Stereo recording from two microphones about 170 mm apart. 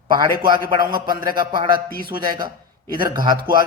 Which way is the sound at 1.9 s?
60° right (ahead or behind).